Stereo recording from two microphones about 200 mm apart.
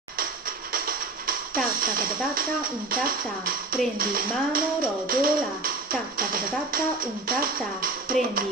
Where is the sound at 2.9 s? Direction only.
45° right (ahead or behind).